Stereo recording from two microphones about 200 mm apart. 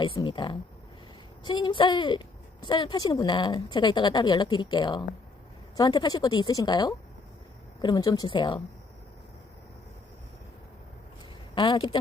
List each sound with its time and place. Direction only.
0.0 s a woman's voice: 25° left (ahead or behind)
11.5 s a woman's voice: 25° left (ahead or behind)